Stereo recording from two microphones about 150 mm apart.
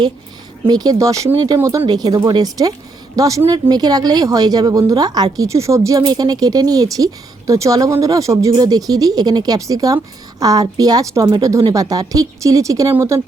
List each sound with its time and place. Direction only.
0.7 s speech: 25° right (ahead or behind)